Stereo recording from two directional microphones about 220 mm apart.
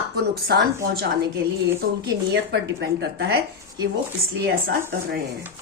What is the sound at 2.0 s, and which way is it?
A woman's voice, 50° right (ahead or behind).